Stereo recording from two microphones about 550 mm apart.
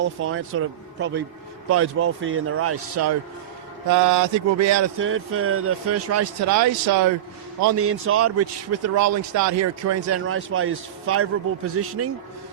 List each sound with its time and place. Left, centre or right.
0.0 s a man's voice: right